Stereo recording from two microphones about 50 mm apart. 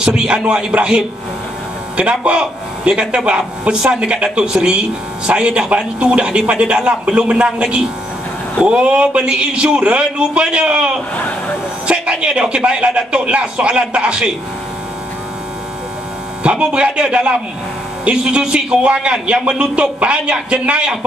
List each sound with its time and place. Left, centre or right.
0.0 s a man's voice: centre
11.1 s speech: left
11.9 s speech: right
16.4 s speech: right